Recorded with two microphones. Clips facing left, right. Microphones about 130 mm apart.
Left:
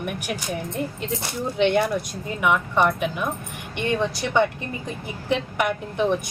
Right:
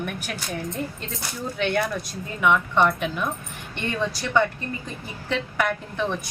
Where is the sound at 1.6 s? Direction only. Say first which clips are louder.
Left 5 dB; 25° left (ahead or behind).